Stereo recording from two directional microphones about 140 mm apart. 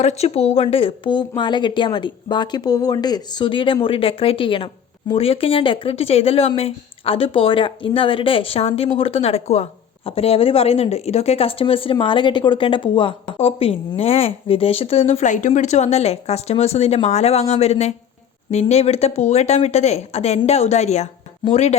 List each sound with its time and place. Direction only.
0.0 s a woman's voice: 50° left (ahead or behind)